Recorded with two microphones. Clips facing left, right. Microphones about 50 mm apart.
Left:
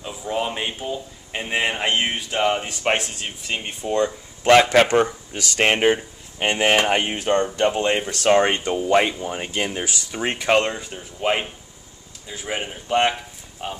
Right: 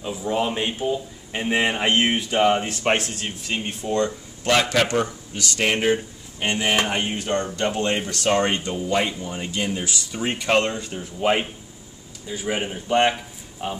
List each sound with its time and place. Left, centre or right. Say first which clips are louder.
0.0 s speech: right 2 dB; centre
4.5 s a man's voice: left 6 dB; left
7.1 s a man's voice: left 4 dB; left
8.8 s a man's voice: left 6 dB; left
10.5 s a man's voice: left 1 dB; centre